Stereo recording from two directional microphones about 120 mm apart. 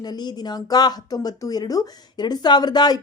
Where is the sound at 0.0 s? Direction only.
35° left (ahead or behind).